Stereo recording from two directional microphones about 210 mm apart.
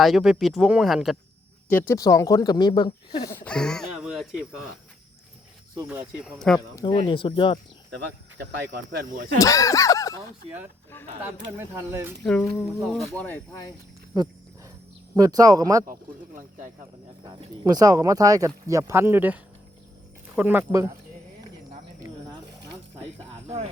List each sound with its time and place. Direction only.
0.0 s speech: centre (ahead or behind)
1.7 s speech: 10° left (ahead or behind)
3.3 s speech: 5° left (ahead or behind)
5.9 s speech: 5° right (ahead or behind)
6.7 s speech: 25° left (ahead or behind)
8.4 s speech: 55° right (ahead or behind)
9.4 s speech: 15° left (ahead or behind)
11.5 s speech: 10° right (ahead or behind)
12.2 s speech: 5° left (ahead or behind)
15.1 s speech: 15° right (ahead or behind)
17.2 s speech: 15° right (ahead or behind)